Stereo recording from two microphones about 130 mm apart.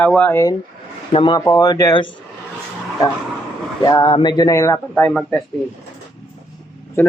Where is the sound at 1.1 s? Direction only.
40° left (ahead or behind).